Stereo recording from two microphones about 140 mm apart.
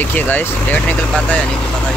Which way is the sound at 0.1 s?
15° left (ahead or behind).